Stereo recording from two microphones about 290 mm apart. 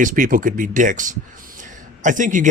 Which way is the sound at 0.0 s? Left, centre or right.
Right.